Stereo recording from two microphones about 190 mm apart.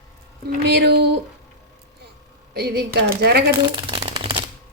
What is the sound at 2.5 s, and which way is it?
Speech, 55° right (ahead or behind).